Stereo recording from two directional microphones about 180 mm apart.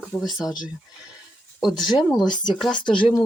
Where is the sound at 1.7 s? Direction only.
25° left (ahead or behind).